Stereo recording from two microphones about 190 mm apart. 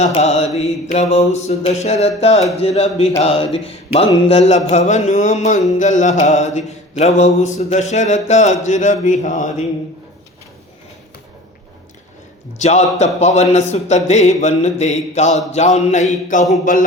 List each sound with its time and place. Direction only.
0.0 s music: 35° left (ahead or behind)
12.5 s music: 35° left (ahead or behind)
16.5 s a sound: 45° left (ahead or behind)